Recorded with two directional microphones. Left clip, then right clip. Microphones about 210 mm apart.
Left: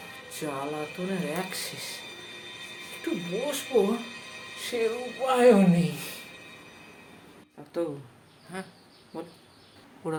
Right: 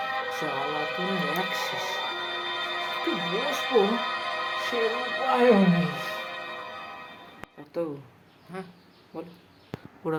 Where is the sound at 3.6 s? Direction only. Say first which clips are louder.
Right 2 dB; 50° right (ahead or behind).